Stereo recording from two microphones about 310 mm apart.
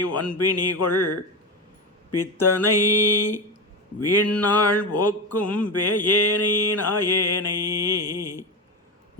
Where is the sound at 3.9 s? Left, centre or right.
Left.